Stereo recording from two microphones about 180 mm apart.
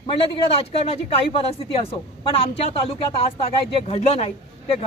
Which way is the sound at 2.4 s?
30° left (ahead or behind).